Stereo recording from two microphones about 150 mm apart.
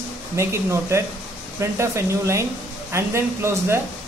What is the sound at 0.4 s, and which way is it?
Speech, 20° right (ahead or behind).